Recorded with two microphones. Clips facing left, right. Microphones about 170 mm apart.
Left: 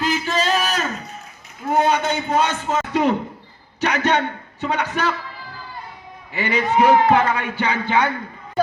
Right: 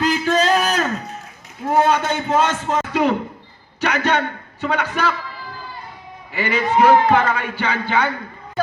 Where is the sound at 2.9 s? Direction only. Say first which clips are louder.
Left 1 dB; 20° left (ahead or behind).